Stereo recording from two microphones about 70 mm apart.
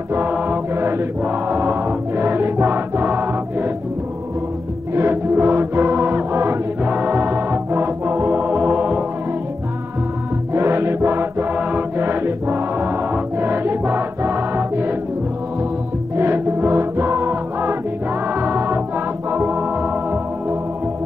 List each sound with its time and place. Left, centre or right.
0.1 s music: right
4.9 s music: right
10.5 s music: right
16.2 s music: right
19.8 s organ: right